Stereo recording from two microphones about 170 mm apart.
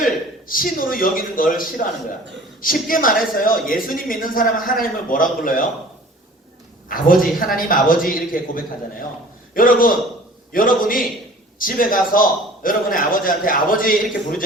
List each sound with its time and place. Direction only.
0.0 s a man's voice: 55° left (ahead or behind)
6.8 s a man's voice: 55° left (ahead or behind)